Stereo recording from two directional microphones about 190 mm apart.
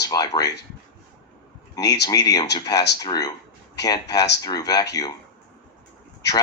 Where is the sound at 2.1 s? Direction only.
20° left (ahead or behind).